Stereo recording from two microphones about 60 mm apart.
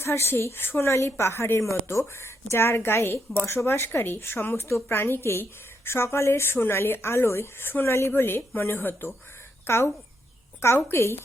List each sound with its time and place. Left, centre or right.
0.0 s a woman's voice: left